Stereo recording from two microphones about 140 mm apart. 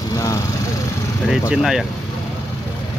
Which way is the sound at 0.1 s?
25° left (ahead or behind).